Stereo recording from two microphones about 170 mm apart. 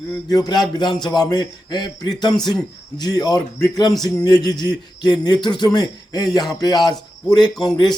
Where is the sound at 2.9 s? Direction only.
25° left (ahead or behind).